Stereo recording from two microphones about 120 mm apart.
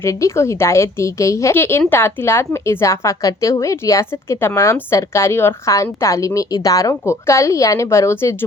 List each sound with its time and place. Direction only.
0.0 s a woman's voice: 25° left (ahead or behind)